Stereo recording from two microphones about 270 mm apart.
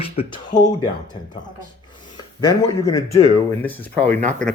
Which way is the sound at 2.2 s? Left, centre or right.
Centre.